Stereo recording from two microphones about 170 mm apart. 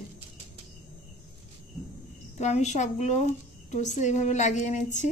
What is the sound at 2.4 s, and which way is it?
A woman's voice, 40° left (ahead or behind).